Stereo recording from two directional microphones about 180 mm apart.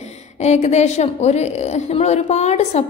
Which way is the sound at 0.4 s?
40° left (ahead or behind).